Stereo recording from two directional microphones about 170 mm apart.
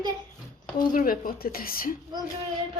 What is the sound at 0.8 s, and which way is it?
Speech, 55° left (ahead or behind).